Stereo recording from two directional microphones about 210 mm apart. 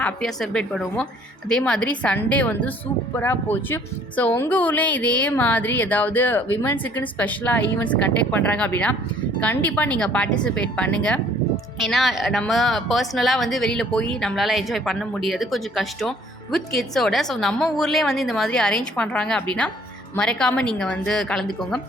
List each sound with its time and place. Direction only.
0.0 s a woman's voice: centre (ahead or behind)